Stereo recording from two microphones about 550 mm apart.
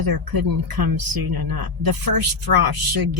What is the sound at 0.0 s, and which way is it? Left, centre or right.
Speech, right.